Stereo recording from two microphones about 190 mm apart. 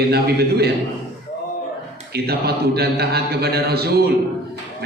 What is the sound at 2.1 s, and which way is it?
A man's voice, 55° right (ahead or behind).